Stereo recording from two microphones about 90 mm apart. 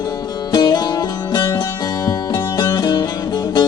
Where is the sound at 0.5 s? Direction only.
50° left (ahead or behind).